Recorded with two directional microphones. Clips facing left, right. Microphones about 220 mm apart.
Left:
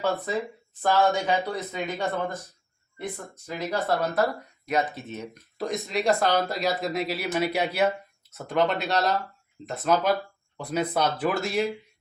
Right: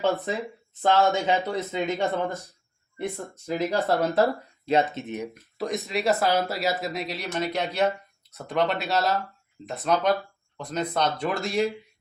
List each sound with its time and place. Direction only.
0.7 s speech: 20° right (ahead or behind)
5.3 s speech: centre (ahead or behind)